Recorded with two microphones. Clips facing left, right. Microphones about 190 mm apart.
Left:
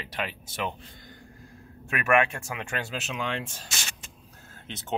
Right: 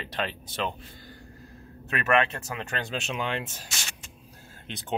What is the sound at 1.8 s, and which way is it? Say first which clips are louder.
Speech: left 1 dB; 10° left (ahead or behind).